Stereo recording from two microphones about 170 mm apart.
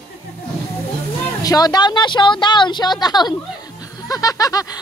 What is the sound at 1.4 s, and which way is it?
A woman's voice, 20° left (ahead or behind).